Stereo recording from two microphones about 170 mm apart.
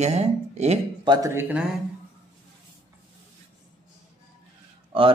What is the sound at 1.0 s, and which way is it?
Speech, 20° right (ahead or behind).